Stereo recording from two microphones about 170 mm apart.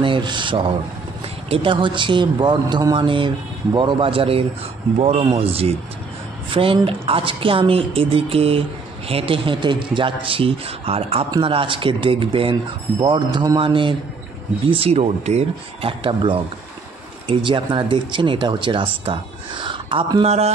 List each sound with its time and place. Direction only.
0.0 s a woman's voice: 30° right (ahead or behind)